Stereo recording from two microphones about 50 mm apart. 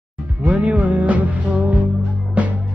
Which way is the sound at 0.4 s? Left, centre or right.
Right.